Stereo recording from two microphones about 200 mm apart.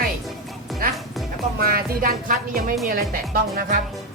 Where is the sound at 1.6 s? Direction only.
45° right (ahead or behind).